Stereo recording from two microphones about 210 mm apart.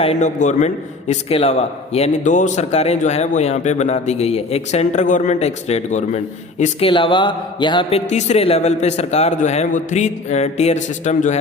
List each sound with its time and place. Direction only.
0.0 s a man's voice: 30° left (ahead or behind)